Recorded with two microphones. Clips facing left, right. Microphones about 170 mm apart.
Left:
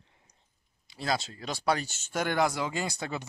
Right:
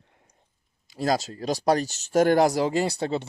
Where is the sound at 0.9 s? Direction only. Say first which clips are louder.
Right 7 dB; 45° right (ahead or behind).